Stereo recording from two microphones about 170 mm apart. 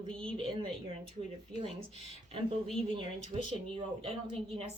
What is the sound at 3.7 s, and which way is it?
Speech, 30° right (ahead or behind).